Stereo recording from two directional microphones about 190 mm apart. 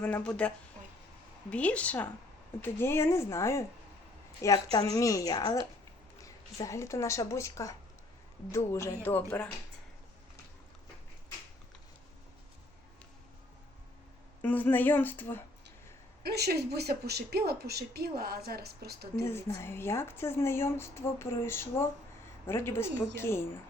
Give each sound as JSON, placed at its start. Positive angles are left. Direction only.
{"t": 0.0, "sound": "a woman's voice", "side_deg": 5}
{"t": 14.4, "sound": "a woman's voice", "side_deg": 10}
{"t": 16.2, "sound": "a woman's voice", "side_deg": -55}
{"t": 19.2, "sound": "a woman's voice", "side_deg": 15}